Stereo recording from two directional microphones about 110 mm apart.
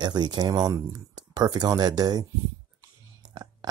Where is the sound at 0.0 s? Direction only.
40° right (ahead or behind).